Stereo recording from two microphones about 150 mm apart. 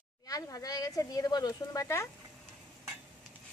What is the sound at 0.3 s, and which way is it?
Speech, 25° left (ahead or behind).